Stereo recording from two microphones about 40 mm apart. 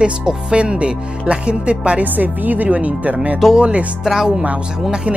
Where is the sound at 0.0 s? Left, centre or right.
Right.